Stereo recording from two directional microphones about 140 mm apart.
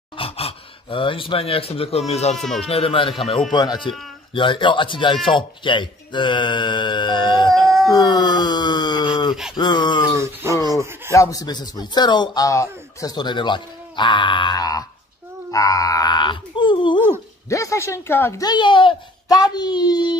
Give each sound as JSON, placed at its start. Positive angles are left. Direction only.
{"t": 0.2, "sound": "speech", "side_deg": 40}
{"t": 2.3, "sound": "speech", "side_deg": 5}
{"t": 2.7, "sound": "speech", "side_deg": 40}
{"t": 7.5, "sound": "baby cry", "side_deg": 0}
{"t": 7.9, "sound": "wail", "side_deg": 30}
{"t": 9.6, "sound": "speech", "side_deg": 30}
{"t": 10.1, "sound": "a sound", "side_deg": -20}
{"t": 11.1, "sound": "speech", "side_deg": 25}
{"t": 17.5, "sound": "speech", "side_deg": 20}
{"t": 18.4, "sound": "speech", "side_deg": 35}